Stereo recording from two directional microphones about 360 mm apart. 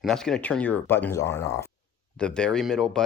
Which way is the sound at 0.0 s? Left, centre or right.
Centre.